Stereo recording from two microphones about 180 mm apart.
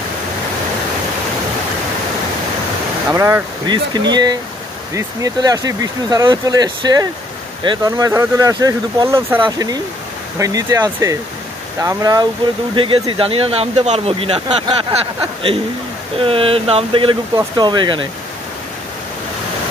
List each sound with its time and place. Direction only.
3.1 s speech: 15° right (ahead or behind); by 14.8 s 30° right (ahead or behind)
16.2 s speech: 30° right (ahead or behind)